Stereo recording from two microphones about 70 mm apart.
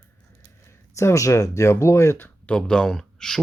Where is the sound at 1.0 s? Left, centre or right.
Left.